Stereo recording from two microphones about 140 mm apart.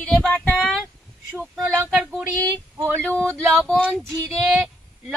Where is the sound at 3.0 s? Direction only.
10° left (ahead or behind).